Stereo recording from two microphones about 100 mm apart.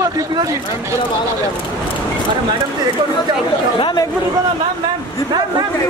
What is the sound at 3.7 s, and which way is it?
Speech, 55° left (ahead or behind).